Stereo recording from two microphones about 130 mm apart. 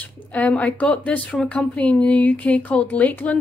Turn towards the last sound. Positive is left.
turn(degrees=10)  # may be behind; listen again after turning